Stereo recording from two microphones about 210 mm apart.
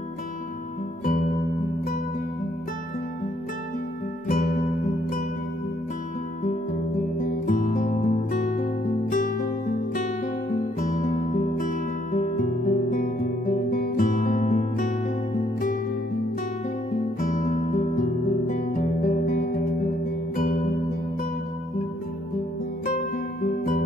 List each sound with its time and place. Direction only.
1.0 s music: 35° left (ahead or behind)
4.3 s music: 40° left (ahead or behind)
7.0 s music: 40° left (ahead or behind)
16.9 s music: 40° left (ahead or behind)
23.4 s music: 40° left (ahead or behind)